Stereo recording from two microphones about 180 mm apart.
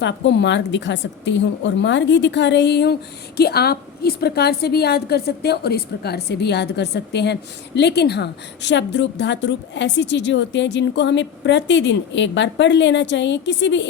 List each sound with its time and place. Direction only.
0.0 s a woman's voice: 75° left (ahead or behind)